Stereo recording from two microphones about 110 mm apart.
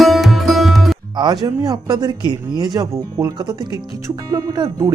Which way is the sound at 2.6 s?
40° right (ahead or behind).